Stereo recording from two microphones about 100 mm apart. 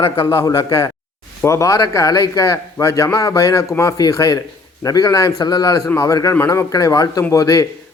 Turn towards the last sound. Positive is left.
turn(degrees=30)  # may be behind; listen again after turning